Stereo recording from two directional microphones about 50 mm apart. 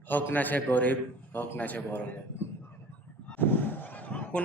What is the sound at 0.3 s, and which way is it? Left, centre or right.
A man's voice, left.